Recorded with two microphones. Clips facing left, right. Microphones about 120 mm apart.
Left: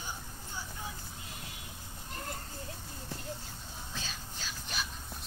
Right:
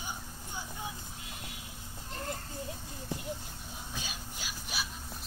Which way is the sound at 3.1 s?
15° right (ahead or behind).